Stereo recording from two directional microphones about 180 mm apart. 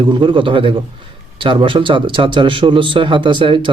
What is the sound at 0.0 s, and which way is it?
A man's voice, 25° right (ahead or behind).